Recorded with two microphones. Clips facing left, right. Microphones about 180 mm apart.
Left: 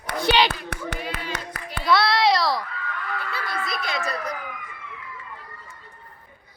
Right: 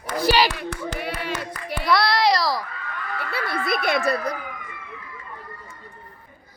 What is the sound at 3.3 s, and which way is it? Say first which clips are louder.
Speech: right 8 dB; 60° right (ahead or behind).